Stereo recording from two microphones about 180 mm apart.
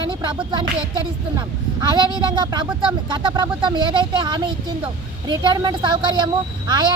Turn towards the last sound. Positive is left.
turn(degrees=-25)  # may be behind; listen again after turning